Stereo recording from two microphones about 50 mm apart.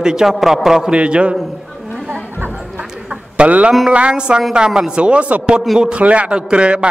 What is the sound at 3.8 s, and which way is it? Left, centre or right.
A man's voice, centre.